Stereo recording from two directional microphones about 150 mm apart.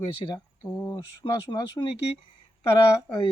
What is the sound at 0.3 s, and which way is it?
Speech, 25° left (ahead or behind).